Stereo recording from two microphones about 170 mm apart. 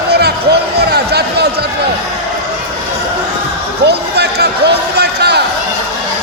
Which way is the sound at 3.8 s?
75° right (ahead or behind).